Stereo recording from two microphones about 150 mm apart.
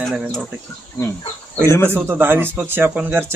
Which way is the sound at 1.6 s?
15° left (ahead or behind).